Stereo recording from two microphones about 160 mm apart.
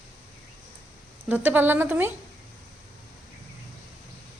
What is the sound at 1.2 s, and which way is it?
Speech, 10° right (ahead or behind).